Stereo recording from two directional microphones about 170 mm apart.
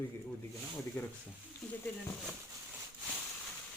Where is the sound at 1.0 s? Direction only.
15° left (ahead or behind).